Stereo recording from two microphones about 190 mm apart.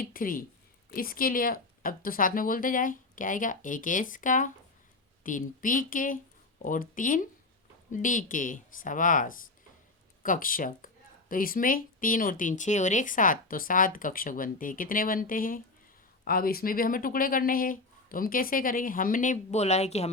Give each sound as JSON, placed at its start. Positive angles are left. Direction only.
{"t": 0.0, "sound": "speech", "side_deg": 45}